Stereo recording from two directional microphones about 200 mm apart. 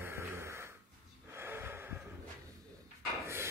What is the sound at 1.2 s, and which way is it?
Snort, 10° right (ahead or behind).